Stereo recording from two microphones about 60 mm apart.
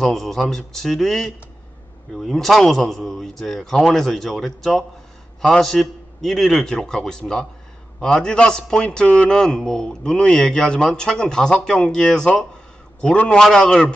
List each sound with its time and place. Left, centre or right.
0.0 s a man's voice: centre